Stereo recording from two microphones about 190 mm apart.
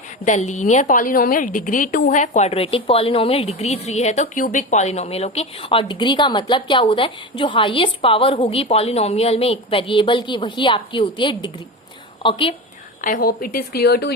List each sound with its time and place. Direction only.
0.3 s a woman's voice: 40° left (ahead or behind)
13.0 s speech: 45° left (ahead or behind)